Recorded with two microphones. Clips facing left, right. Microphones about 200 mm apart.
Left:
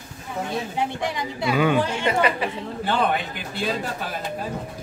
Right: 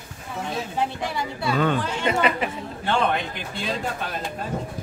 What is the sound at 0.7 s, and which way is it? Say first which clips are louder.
Speech: right 1 dB; 20° left (ahead or behind).